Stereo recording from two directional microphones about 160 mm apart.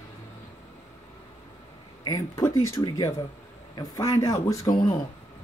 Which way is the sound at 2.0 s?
20° left (ahead or behind).